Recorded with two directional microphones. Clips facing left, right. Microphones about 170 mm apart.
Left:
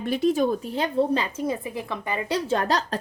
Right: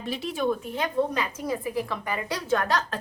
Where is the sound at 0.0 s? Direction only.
50° left (ahead or behind).